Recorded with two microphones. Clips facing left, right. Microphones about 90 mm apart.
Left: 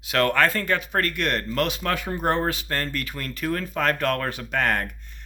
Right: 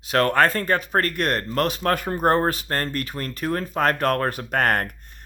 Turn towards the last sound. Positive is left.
turn(degrees=-50)  # may be behind; listen again after turning